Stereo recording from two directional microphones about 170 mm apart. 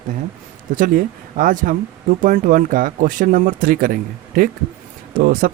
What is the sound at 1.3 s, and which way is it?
Speech, 55° right (ahead or behind).